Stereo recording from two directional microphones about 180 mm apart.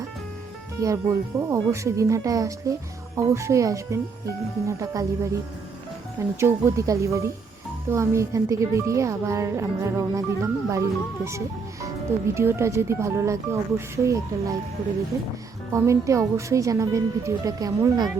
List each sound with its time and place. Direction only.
0.8 s speech: 15° right (ahead or behind)
6.4 s speech: 15° right (ahead or behind)
11.3 s music: 15° right (ahead or behind)
12.3 s speech: 15° right (ahead or behind)
15.7 s speech: 15° right (ahead or behind)